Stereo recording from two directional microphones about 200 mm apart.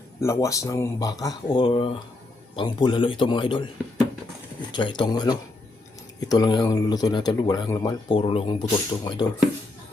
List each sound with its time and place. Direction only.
0.2 s speech: 15° left (ahead or behind)
4.7 s speech: 25° left (ahead or behind)